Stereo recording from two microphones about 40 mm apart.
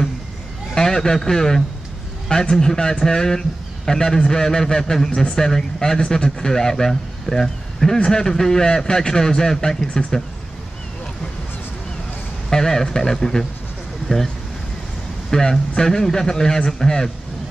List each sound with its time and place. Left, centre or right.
0.7 s a man's voice: centre
12.4 s speech: centre